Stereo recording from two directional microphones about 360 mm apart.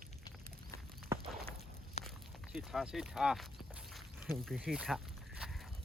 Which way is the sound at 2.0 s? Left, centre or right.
Centre.